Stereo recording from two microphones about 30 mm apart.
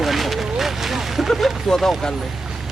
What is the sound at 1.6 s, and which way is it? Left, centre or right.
Speech, centre.